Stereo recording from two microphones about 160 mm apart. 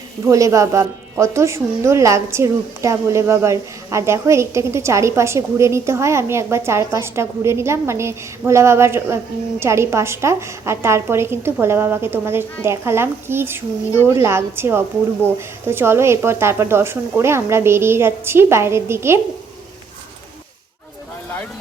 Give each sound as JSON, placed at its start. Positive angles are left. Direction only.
{"t": 0.3, "sound": "speech", "side_deg": -20}